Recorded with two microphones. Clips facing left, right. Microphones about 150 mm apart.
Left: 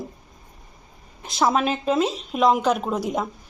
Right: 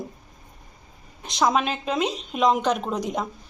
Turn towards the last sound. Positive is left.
turn(degrees=5)  # may be behind; listen again after turning